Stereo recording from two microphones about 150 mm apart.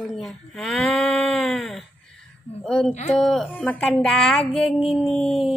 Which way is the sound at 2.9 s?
50° left (ahead or behind).